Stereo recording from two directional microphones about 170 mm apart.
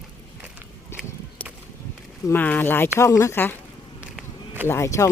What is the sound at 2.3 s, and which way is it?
Speech, 10° left (ahead or behind).